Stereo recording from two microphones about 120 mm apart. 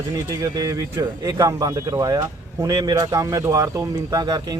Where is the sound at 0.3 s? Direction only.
30° right (ahead or behind).